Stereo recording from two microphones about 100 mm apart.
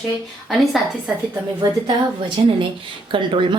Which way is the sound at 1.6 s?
50° right (ahead or behind).